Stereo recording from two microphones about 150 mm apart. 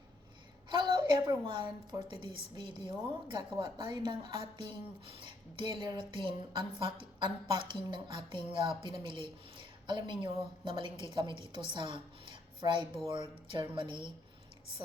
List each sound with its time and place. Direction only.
0.7 s a woman's voice: 30° right (ahead or behind)